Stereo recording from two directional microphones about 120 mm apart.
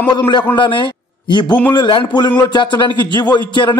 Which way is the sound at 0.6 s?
40° left (ahead or behind).